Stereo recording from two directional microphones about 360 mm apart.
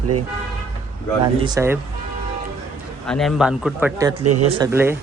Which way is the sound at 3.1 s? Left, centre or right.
Centre.